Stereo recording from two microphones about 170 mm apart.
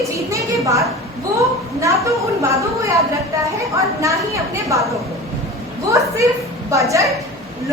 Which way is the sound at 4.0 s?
20° right (ahead or behind).